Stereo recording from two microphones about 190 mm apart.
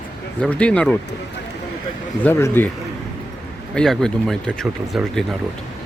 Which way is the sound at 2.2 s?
10° left (ahead or behind).